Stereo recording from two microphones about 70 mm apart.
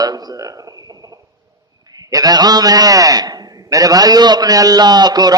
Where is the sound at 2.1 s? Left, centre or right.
Right.